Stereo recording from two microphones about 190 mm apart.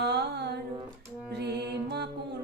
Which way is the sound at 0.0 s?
60° right (ahead or behind).